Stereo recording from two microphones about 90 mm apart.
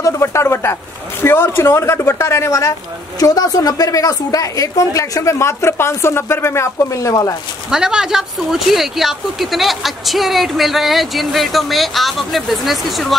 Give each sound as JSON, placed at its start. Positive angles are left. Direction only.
{"t": 0.0, "sound": "a sound", "side_deg": 30}
{"t": 1.2, "sound": "a woman's voice", "side_deg": 25}
{"t": 7.7, "sound": "speech", "side_deg": -10}